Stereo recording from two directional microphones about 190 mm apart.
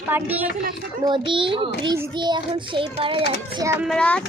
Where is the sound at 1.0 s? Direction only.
25° right (ahead or behind).